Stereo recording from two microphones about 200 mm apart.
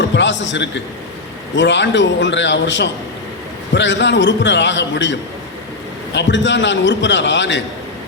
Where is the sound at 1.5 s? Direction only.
65° left (ahead or behind).